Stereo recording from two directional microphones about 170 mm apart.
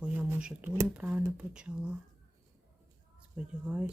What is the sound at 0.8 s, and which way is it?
Speech, 5° right (ahead or behind).